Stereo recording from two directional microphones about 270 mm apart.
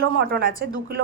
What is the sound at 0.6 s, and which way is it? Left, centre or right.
Speech, right.